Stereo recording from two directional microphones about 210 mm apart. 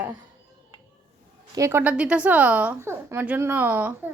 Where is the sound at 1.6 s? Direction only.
10° right (ahead or behind).